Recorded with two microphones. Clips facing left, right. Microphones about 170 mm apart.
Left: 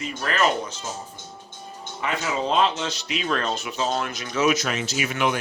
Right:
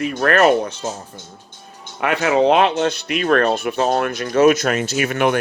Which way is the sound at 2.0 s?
65° right (ahead or behind).